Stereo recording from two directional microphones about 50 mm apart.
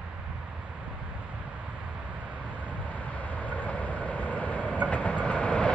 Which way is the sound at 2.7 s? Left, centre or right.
Left.